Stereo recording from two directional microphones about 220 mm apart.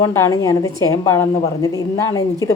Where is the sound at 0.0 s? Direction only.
15° left (ahead or behind).